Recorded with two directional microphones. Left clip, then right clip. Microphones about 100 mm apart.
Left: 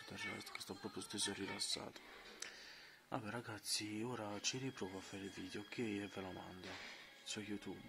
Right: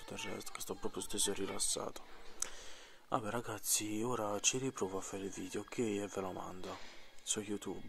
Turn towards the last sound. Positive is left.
turn(degrees=-35)  # may be behind; listen again after turning